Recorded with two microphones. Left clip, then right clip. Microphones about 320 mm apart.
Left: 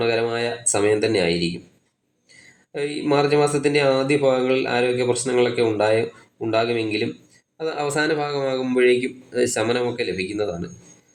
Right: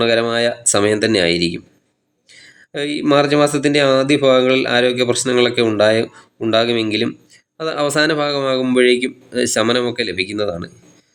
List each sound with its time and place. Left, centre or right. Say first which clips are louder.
0.0 s speech: right 6 dB; right
2.7 s speech: right 6 dB; right